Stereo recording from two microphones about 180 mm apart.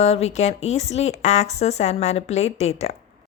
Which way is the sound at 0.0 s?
35° left (ahead or behind).